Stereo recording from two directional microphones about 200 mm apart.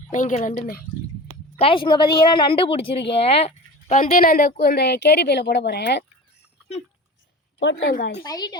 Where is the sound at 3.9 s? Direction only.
45° left (ahead or behind).